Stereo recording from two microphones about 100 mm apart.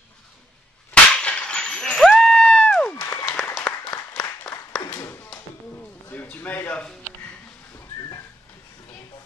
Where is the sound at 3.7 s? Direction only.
15° left (ahead or behind).